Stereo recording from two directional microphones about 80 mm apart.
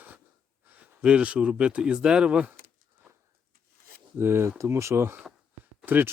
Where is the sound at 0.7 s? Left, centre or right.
Centre.